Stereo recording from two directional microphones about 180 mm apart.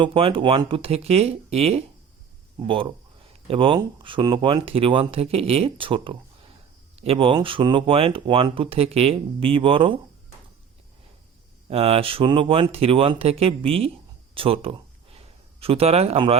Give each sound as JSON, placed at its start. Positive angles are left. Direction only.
{"t": 0.0, "sound": "speech", "side_deg": -30}
{"t": 11.7, "sound": "speech", "side_deg": -35}
{"t": 14.3, "sound": "a sound", "side_deg": -30}